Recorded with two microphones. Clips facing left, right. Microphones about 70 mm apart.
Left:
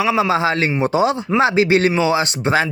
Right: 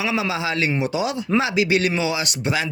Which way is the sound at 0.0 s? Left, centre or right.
Left.